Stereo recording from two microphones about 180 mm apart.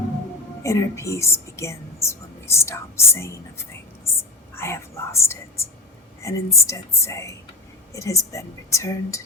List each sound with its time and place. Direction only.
0.6 s speech: 15° left (ahead or behind)